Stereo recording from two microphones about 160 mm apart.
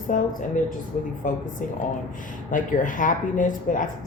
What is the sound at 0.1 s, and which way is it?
Speech, 55° left (ahead or behind).